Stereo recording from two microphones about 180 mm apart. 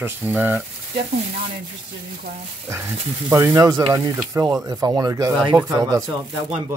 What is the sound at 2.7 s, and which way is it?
Speech, 15° right (ahead or behind).